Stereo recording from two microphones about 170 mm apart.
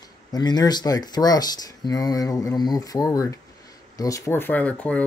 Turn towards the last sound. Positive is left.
turn(degrees=10)  # may be behind; listen again after turning